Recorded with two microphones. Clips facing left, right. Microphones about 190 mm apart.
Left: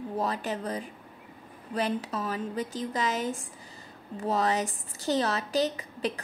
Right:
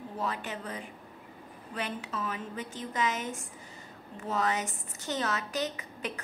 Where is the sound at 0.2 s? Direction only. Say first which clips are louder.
Left 4 dB; 35° left (ahead or behind).